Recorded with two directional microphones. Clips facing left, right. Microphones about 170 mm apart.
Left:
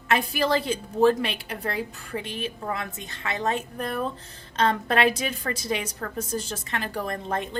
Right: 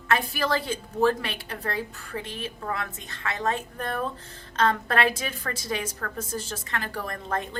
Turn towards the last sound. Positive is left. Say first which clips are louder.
# left 2 dB
turn(degrees=20)  # may be behind; listen again after turning